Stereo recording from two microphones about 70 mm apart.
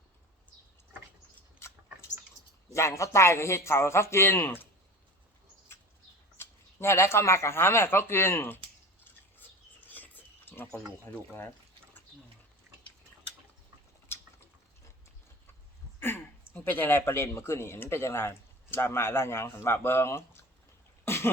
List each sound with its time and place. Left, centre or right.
1.5 s mouse: left
2.7 s speech: left
6.3 s a sound: left
11.1 s speech: left
16.0 s a sound: left
16.6 s speech: left
21.0 s cough: left